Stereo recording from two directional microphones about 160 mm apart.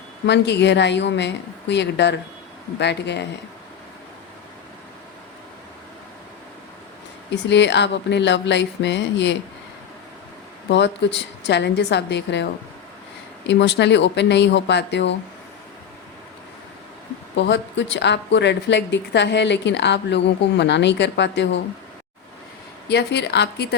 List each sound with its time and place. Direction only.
0.3 s a woman's voice: 90° left
7.3 s a woman's voice: 90° left
10.7 s a woman's voice: 90° left
13.5 s a woman's voice: 90° left
17.3 s a woman's voice: 90° left
22.9 s a woman's voice: 90° left